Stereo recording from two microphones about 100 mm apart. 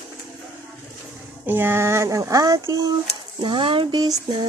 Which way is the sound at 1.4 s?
20° right (ahead or behind).